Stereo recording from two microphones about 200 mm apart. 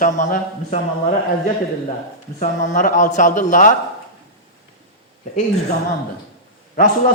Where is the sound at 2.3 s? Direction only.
40° left (ahead or behind).